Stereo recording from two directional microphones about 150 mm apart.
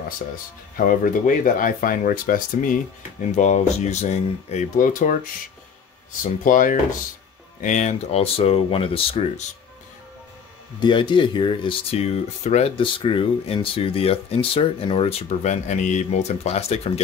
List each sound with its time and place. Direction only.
0.7 s speech: 65° left (ahead or behind)
3.3 s speech: 50° left (ahead or behind)
6.4 s speech: 60° left (ahead or behind); by 9.2 s 40° left (ahead or behind)
10.8 s speech: 30° left (ahead or behind)